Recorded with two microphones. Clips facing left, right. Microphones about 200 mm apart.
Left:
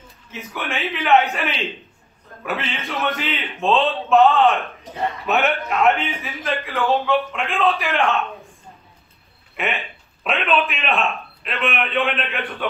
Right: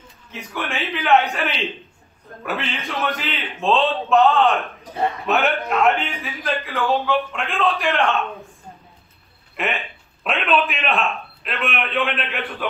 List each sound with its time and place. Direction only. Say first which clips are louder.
0.3 s a man's voice: even; centre (ahead or behind)
9.6 s a man's voice: even; centre (ahead or behind)